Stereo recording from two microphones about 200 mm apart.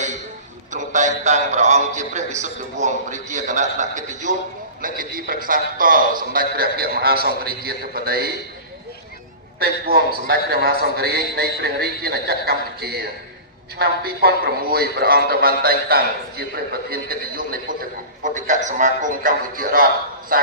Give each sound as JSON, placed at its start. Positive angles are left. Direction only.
{"t": 0.7, "sound": "a man's voice", "side_deg": -40}
{"t": 9.6, "sound": "a man's voice", "side_deg": -50}
{"t": 18.2, "sound": "a man's voice", "side_deg": -40}